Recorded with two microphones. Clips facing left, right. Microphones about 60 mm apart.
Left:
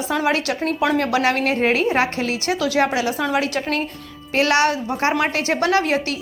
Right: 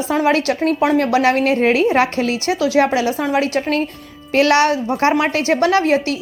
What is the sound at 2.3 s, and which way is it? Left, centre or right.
Speech, left.